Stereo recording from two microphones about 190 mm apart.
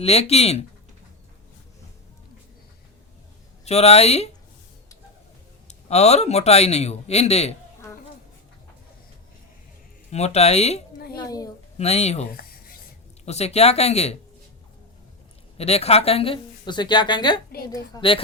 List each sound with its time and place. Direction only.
0.0 s a man's voice: 35° left (ahead or behind)
3.7 s a man's voice: 35° left (ahead or behind)
5.6 s a man's voice: 35° left (ahead or behind)
10.1 s a man's voice: 35° left (ahead or behind)
11.1 s a woman's voice: 20° left (ahead or behind)
11.8 s a man's voice: 35° left (ahead or behind)
12.3 s writing: 50° left (ahead or behind)
13.2 s a man's voice: 35° left (ahead or behind)
15.5 s a woman's voice: 35° left (ahead or behind)